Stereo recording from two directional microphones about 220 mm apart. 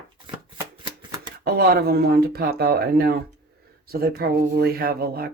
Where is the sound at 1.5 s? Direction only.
45° right (ahead or behind).